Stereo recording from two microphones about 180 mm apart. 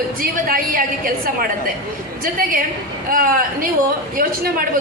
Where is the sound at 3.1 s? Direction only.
50° right (ahead or behind).